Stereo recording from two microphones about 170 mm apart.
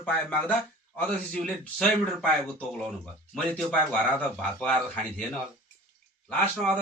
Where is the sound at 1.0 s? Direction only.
10° left (ahead or behind).